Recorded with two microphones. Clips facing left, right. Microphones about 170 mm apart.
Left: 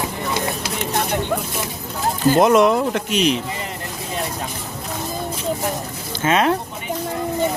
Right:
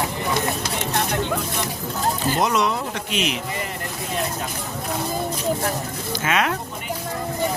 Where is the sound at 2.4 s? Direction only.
50° left (ahead or behind).